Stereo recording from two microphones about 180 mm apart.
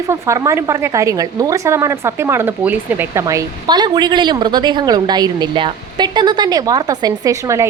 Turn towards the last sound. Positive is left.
turn(degrees=-20)  # may be behind; listen again after turning